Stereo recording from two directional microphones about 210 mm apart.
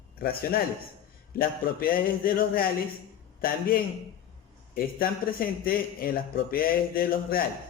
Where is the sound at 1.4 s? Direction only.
45° left (ahead or behind).